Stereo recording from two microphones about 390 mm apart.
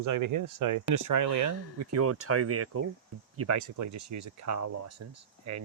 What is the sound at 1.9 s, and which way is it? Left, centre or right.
Speech, right.